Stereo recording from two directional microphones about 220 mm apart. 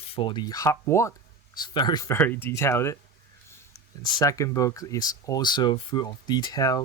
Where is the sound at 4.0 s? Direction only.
15° left (ahead or behind).